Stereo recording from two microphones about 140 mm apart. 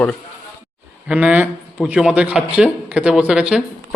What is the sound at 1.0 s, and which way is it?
A man's voice, 10° right (ahead or behind).